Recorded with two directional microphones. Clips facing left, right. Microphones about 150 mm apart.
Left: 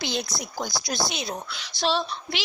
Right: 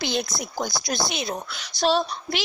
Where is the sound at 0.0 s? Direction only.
55° right (ahead or behind).